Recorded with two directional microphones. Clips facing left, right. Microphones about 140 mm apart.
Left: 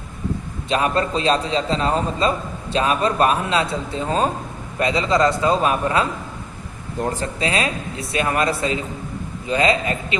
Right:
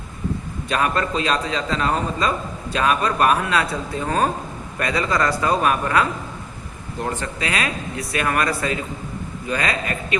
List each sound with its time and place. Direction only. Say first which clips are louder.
0.7 s a man's voice: left 2 dB; 30° left (ahead or behind)
7.1 s a man's voice: left 2 dB; 35° left (ahead or behind)